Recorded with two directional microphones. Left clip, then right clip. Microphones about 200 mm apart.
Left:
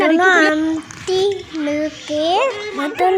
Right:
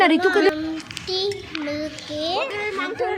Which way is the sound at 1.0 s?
65° left (ahead or behind).